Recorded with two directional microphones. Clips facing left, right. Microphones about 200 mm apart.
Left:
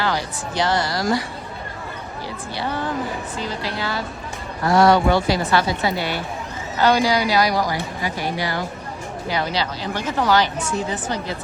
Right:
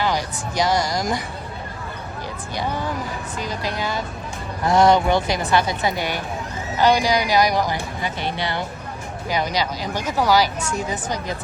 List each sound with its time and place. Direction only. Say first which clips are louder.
0.0 s speech: right 1 dB; 15° right (ahead or behind)
2.6 s a woman's voice: left 1 dB; 15° right (ahead or behind)
9.3 s speech: right 1 dB; 15° right (ahead or behind)